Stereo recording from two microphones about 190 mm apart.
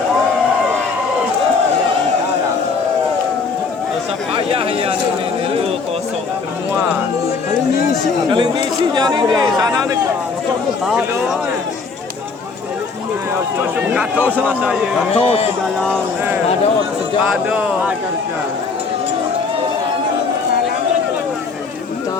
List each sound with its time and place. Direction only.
4.4 s a sound: 30° right (ahead or behind)
8.3 s speech: 25° right (ahead or behind)
13.6 s a man's voice: 10° right (ahead or behind)
15.1 s speech: 35° left (ahead or behind)
17.3 s speech: 5° right (ahead or behind)